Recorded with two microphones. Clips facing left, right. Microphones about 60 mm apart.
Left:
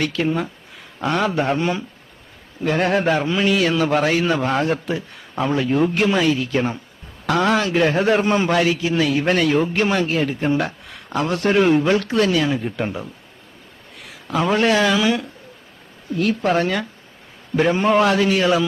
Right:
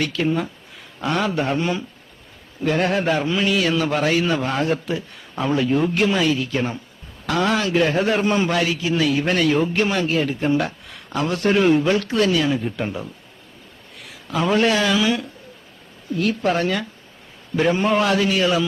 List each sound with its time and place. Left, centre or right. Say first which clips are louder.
0.0 s a man's voice: left 1 dB; left
14.3 s a man's voice: left 1 dB; left